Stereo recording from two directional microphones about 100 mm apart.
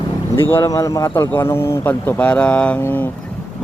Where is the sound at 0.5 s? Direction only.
30° left (ahead or behind).